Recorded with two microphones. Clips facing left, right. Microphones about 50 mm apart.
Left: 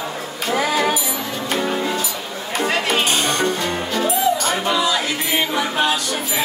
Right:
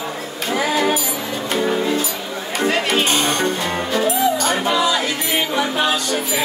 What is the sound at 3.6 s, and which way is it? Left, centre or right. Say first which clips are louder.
Music: right 2 dB; centre.